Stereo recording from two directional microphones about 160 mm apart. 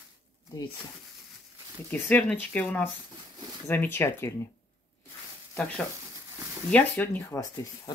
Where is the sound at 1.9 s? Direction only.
10° left (ahead or behind).